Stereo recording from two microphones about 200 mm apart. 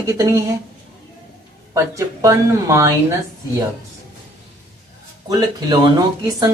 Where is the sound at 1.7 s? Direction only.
15° right (ahead or behind).